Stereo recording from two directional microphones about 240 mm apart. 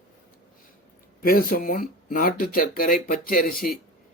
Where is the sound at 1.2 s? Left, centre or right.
Left.